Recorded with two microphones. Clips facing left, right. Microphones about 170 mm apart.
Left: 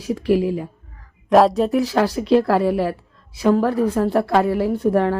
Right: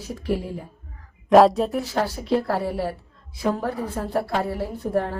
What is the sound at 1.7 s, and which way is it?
A woman's voice, 90° left.